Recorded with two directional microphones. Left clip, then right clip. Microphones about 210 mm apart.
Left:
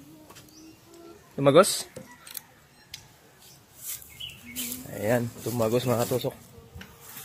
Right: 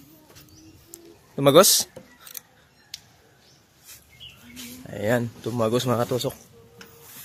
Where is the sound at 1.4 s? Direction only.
45° right (ahead or behind).